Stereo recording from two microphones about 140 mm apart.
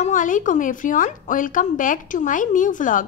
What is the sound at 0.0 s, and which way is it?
A woman's voice, 65° left (ahead or behind).